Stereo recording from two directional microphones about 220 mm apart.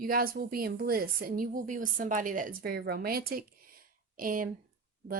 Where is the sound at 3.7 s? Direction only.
40° right (ahead or behind).